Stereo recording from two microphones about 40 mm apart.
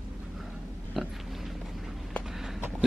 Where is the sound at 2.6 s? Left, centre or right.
Right.